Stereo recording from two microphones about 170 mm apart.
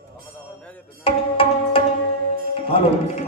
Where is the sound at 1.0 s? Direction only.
35° left (ahead or behind).